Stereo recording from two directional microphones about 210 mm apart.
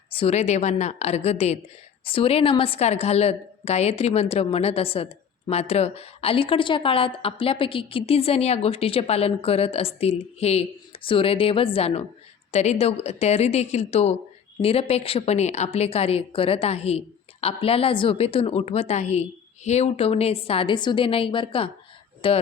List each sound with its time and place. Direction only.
0.1 s a woman's voice: 30° left (ahead or behind)